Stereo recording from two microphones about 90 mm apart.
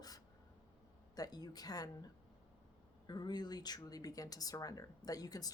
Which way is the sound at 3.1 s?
50° left (ahead or behind).